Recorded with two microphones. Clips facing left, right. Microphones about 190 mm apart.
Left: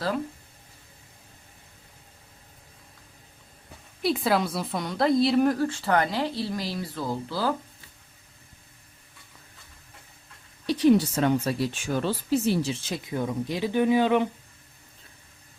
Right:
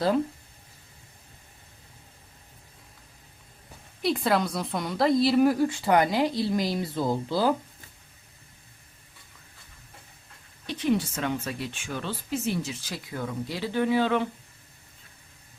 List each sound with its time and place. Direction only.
4.0 s a woman's voice: centre (ahead or behind); by 7.5 s 20° right (ahead or behind)
10.7 s speech: 35° left (ahead or behind); by 14.3 s 15° left (ahead or behind)